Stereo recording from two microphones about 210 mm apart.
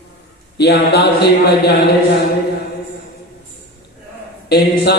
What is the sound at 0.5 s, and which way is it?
Speech, 50° left (ahead or behind).